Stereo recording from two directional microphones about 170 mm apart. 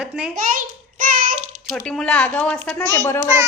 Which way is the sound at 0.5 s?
50° right (ahead or behind).